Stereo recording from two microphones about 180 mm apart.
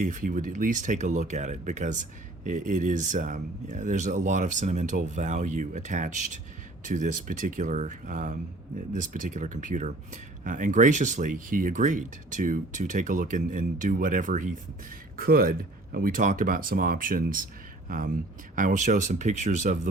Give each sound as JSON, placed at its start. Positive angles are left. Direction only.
{"t": 0.0, "sound": "speech", "side_deg": -45}